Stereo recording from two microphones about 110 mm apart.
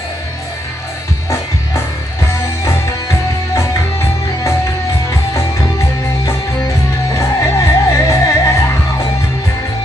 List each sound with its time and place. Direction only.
3.5 s music: 30° left (ahead or behind)
7.2 s music: 30° left (ahead or behind)